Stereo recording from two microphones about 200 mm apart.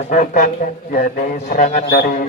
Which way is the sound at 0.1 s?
40° left (ahead or behind).